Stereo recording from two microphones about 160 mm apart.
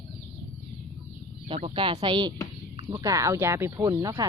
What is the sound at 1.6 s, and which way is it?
Speech, 30° right (ahead or behind).